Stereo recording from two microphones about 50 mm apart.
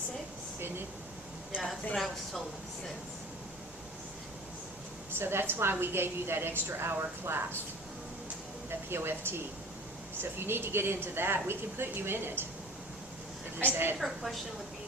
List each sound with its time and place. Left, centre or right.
5.1 s speech: right
8.9 s speech: right
13.6 s speech: right
14.0 s a woman's voice: centre